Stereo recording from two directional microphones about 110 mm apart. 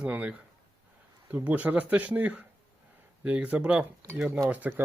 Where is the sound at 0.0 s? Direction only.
10° right (ahead or behind).